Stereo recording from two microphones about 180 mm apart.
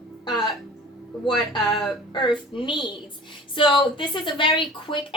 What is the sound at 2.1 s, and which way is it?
A woman's voice, 25° left (ahead or behind).